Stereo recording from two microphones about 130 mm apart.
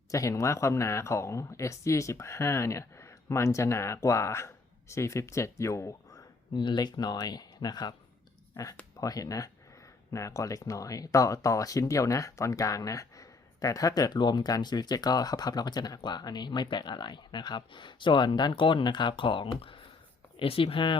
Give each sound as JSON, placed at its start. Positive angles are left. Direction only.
{"t": 0.1, "sound": "speech", "side_deg": 25}
{"t": 9.0, "sound": "speech", "side_deg": 25}